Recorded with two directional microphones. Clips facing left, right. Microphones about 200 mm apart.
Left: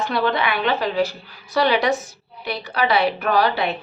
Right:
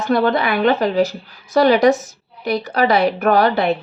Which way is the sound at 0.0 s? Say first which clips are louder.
Right 5 dB; 45° right (ahead or behind).